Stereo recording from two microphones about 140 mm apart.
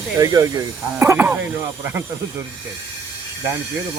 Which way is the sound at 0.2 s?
25° right (ahead or behind).